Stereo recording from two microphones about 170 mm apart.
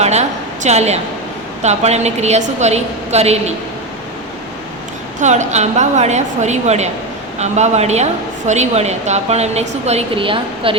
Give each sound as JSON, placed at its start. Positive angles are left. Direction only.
{"t": 0.0, "sound": "a sound", "side_deg": -40}
{"t": 1.6, "sound": "a woman's voice", "side_deg": -40}
{"t": 5.2, "sound": "a woman's voice", "side_deg": -45}